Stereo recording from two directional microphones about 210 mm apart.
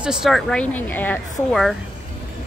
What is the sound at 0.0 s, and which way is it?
Speech, 5° right (ahead or behind).